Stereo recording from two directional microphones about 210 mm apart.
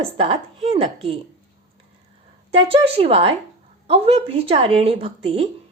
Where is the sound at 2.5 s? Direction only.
25° right (ahead or behind).